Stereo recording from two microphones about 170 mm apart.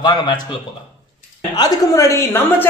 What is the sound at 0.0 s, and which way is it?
A woman's voice, 25° left (ahead or behind).